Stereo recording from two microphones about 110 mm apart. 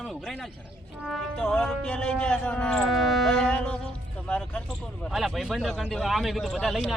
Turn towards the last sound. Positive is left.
turn(degrees=0)  # may be behind; listen again after turning